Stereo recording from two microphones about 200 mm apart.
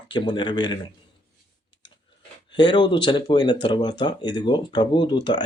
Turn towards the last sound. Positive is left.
turn(degrees=20)  # may be behind; listen again after turning